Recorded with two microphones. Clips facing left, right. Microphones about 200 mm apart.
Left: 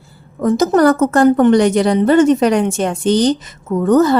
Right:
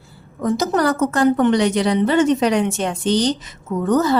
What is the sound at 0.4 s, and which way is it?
Speech, 50° left (ahead or behind).